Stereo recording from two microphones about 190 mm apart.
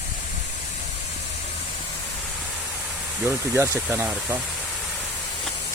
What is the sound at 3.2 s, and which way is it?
Speech, 15° right (ahead or behind).